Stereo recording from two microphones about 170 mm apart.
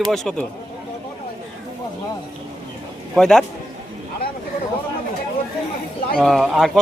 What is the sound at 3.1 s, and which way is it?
Speech, 5° left (ahead or behind).